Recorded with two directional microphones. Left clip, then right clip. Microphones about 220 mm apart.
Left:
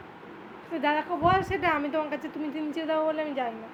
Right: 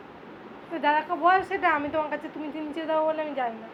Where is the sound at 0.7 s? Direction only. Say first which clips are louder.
Right 3 dB; 25° left (ahead or behind).